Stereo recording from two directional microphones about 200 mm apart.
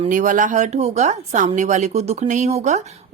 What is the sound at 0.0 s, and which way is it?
A woman's voice, 40° right (ahead or behind).